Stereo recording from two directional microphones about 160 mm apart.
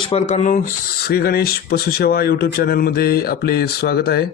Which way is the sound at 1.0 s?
80° left.